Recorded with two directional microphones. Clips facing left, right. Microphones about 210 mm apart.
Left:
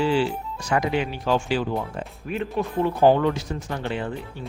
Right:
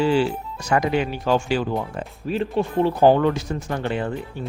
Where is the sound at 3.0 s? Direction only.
45° right (ahead or behind).